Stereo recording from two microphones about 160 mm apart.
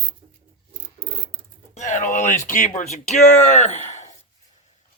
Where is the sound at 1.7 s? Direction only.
50° left (ahead or behind).